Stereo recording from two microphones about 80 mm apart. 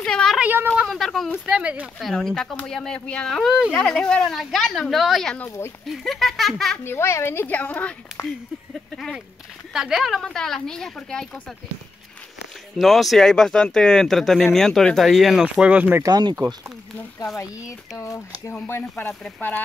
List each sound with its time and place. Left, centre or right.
0.0 s a sound: centre
0.8 s speech: centre
1.4 s speech: centre
2.0 s a woman's voice: centre
6.8 s a woman's voice: left
9.7 s a woman's voice: centre
12.7 s speech: centre
15.5 s speech: centre
16.1 s speech: right
17.9 s speech: left
18.7 s a woman's voice: left